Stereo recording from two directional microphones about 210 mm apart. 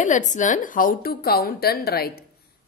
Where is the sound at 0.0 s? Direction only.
35° left (ahead or behind).